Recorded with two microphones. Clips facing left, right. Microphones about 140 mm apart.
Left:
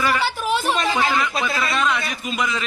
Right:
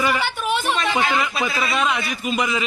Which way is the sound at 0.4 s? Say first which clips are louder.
Even; 30° left (ahead or behind).